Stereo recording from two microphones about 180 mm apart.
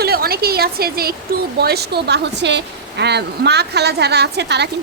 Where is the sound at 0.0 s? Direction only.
60° right (ahead or behind).